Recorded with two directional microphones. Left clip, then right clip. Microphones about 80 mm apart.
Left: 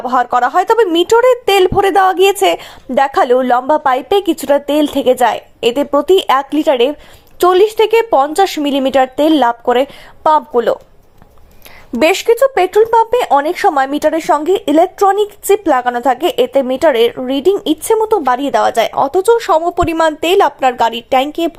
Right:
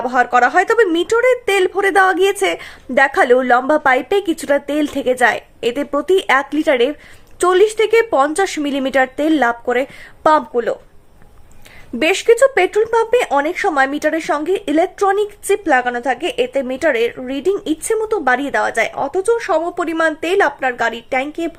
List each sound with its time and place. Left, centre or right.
0.1 s speech: left
12.2 s speech: left